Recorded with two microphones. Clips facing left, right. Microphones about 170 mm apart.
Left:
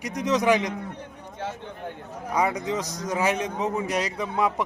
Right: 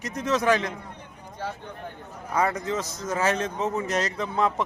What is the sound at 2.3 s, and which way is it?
A man's voice, 15° left (ahead or behind).